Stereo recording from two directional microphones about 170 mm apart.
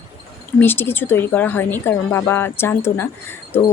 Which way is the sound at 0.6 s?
10° left (ahead or behind).